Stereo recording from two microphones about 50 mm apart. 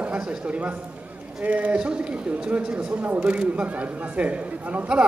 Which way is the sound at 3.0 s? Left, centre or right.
Right.